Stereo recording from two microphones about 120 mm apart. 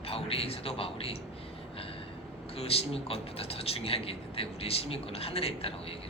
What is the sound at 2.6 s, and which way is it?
Speech, 55° left (ahead or behind).